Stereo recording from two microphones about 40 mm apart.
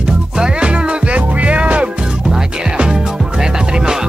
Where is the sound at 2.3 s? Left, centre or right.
Right.